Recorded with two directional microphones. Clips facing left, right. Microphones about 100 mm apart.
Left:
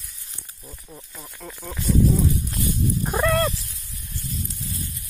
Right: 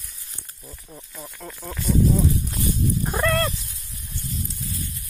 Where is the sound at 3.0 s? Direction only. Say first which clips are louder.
Left 3 dB; 15° left (ahead or behind).